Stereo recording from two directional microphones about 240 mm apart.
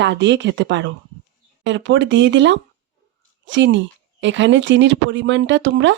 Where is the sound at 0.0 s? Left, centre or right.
Right.